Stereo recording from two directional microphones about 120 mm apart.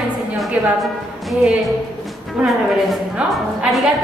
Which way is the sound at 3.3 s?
Centre (ahead or behind).